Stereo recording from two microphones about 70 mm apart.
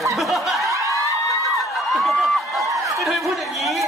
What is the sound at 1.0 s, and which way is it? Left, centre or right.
Crowd, left.